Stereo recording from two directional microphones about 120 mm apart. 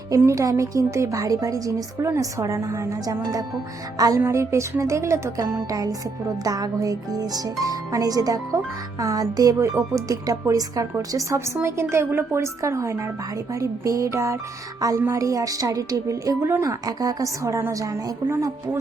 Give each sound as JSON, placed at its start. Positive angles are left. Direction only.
{"t": 0.2, "sound": "speech", "side_deg": -25}
{"t": 3.9, "sound": "music", "side_deg": -30}
{"t": 4.2, "sound": "speech", "side_deg": -25}